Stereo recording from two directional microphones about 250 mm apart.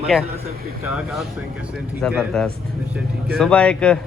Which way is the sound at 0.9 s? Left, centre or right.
Centre.